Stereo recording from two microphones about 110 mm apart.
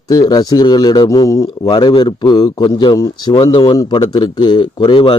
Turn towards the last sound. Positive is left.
turn(degrees=45)  # may be behind; listen again after turning